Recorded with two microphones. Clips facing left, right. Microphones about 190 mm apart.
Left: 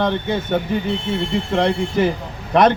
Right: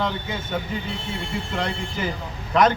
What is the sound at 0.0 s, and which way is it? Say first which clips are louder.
A man's voice: left 7 dB; 65° left (ahead or behind).